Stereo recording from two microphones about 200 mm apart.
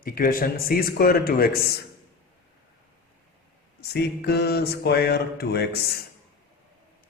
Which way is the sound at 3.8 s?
55° left (ahead or behind).